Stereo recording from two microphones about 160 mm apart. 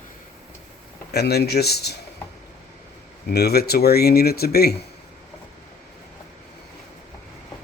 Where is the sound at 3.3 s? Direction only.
80° left.